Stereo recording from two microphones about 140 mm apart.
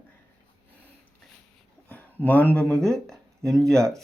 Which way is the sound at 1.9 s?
10° left (ahead or behind).